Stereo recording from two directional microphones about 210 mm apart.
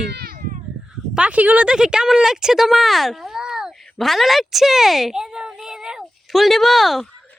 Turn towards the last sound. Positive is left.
turn(degrees=0)  # may be behind; listen again after turning